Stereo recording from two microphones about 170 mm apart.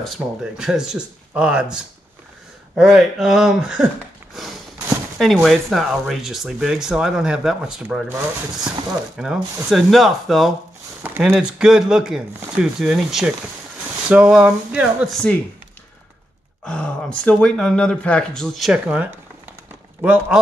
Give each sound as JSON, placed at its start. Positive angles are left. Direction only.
{"t": 0.0, "sound": "speech", "side_deg": -5}
{"t": 5.2, "sound": "speech", "side_deg": 0}
{"t": 11.0, "sound": "speech", "side_deg": -10}
{"t": 16.6, "sound": "speech", "side_deg": 5}